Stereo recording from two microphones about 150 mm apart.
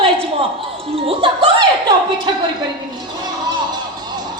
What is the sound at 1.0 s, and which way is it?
Music, 35° right (ahead or behind).